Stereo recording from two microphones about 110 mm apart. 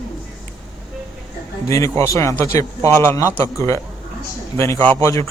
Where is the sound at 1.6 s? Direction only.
30° left (ahead or behind).